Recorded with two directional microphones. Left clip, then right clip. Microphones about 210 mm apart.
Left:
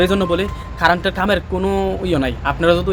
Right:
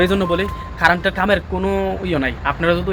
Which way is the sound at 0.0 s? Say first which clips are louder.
Left 1 dB; 15° left (ahead or behind).